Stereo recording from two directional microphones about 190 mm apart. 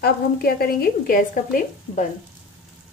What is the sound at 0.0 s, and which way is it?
Speech, 55° left (ahead or behind).